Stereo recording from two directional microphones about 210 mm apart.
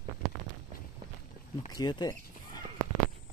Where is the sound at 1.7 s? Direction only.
20° left (ahead or behind).